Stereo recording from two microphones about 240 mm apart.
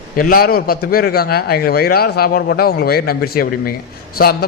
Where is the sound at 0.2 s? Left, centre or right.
Left.